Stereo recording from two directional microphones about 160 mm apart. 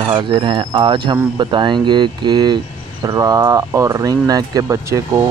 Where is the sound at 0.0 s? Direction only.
30° right (ahead or behind).